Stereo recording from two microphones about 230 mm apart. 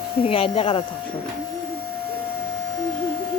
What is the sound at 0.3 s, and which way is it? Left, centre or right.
Speech, left.